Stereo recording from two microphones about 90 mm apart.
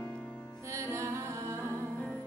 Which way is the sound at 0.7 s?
35° right (ahead or behind).